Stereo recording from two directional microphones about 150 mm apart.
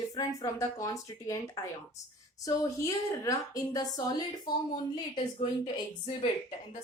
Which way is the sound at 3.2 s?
20° left (ahead or behind).